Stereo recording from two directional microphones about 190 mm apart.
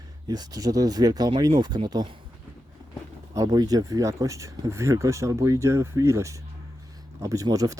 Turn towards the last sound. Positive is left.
turn(degrees=-20)  # may be behind; listen again after turning